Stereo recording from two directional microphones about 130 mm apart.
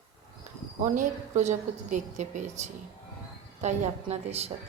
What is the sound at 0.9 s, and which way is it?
A woman's voice, 70° right (ahead or behind).